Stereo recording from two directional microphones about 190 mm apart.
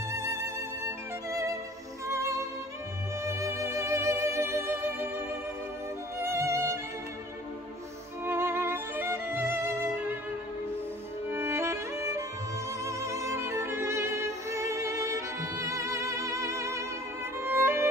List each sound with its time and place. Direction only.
0.1 s music: 15° right (ahead or behind)
6.1 s music: 15° right (ahead or behind)
8.3 s music: 10° right (ahead or behind)
11.2 s music: 15° right (ahead or behind)